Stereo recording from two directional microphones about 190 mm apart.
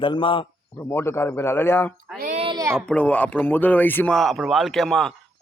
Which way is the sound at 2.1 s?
45° right (ahead or behind).